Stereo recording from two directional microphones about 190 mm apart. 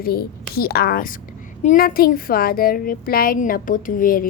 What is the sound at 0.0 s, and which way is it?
Speech, 50° left (ahead or behind).